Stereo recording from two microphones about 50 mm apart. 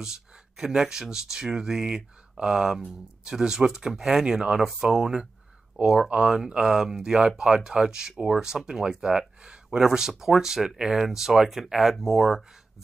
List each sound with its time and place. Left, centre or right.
0.0 s speech: centre
9.4 s a sound: centre
9.8 s speech: centre